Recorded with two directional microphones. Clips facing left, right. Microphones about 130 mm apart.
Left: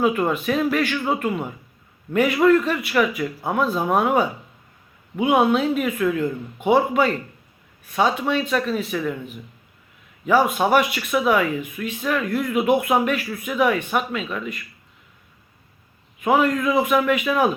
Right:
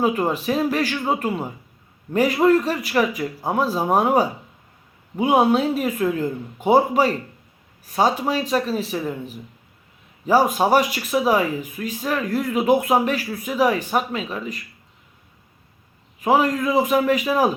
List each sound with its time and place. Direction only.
0.0 s speech: 35° right (ahead or behind)
16.2 s speech: 35° right (ahead or behind)